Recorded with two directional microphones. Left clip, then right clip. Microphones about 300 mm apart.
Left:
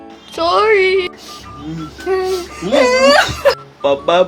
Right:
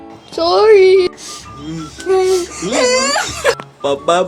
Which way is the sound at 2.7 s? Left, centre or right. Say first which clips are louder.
Left 4 dB; centre.